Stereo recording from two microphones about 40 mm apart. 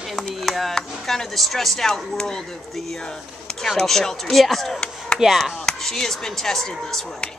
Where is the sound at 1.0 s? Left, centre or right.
Centre.